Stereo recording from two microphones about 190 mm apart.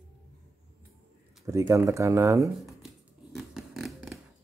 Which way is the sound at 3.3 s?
Centre (ahead or behind).